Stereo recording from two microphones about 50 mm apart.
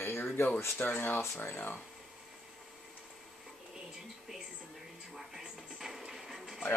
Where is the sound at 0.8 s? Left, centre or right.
Left.